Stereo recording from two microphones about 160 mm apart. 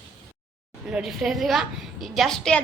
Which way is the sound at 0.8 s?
5° right (ahead or behind).